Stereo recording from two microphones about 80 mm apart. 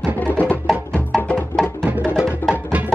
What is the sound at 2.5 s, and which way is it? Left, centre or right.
Music, centre.